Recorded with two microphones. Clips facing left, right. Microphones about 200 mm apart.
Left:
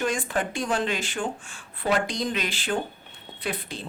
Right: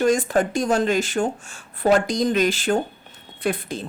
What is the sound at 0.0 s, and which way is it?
A woman's voice, 40° right (ahead or behind).